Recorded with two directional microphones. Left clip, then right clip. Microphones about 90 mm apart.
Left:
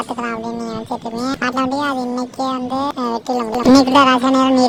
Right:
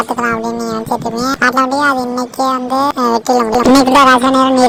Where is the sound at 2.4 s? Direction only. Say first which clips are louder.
Right 8 dB; 20° right (ahead or behind).